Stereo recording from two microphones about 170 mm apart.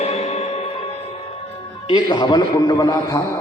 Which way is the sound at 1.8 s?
25° left (ahead or behind).